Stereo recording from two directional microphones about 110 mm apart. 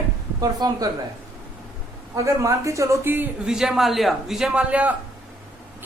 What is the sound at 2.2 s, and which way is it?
A woman's voice, 30° right (ahead or behind).